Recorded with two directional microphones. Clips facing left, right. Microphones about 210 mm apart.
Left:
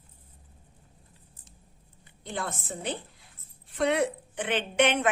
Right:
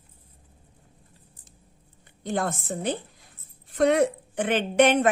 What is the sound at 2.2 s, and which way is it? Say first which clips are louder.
A woman's voice: right 7 dB; 45° right (ahead or behind).